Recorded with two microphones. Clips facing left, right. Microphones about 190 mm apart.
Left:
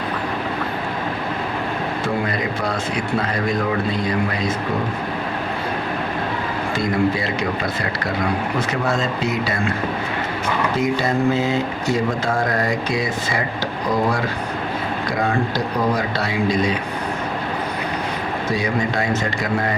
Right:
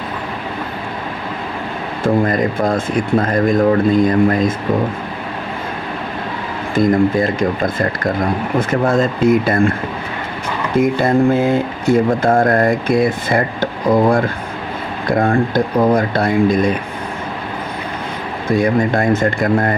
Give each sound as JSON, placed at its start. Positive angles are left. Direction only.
{"t": 2.2, "sound": "speech", "side_deg": -50}
{"t": 6.7, "sound": "speech", "side_deg": -50}
{"t": 10.8, "sound": "speech", "side_deg": -55}
{"t": 15.0, "sound": "speech", "side_deg": -50}
{"t": 18.4, "sound": "speech", "side_deg": -55}